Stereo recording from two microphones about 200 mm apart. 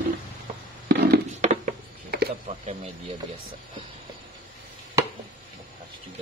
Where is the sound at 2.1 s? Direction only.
55° right (ahead or behind).